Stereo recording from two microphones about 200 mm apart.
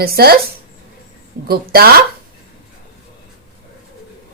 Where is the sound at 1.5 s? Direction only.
50° right (ahead or behind).